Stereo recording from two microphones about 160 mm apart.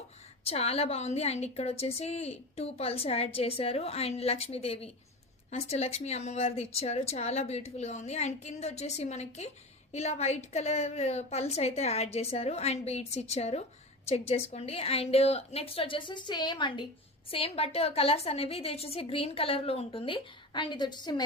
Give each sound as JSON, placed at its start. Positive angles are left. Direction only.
{"t": 0.4, "sound": "a woman's voice", "side_deg": 40}